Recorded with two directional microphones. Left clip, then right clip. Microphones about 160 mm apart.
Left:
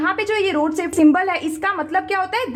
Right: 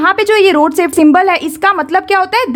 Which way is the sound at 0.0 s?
40° right (ahead or behind).